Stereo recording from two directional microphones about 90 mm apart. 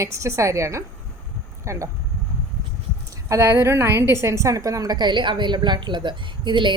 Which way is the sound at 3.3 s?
35° right (ahead or behind).